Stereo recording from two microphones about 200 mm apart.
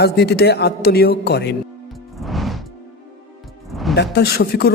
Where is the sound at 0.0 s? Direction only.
55° left (ahead or behind).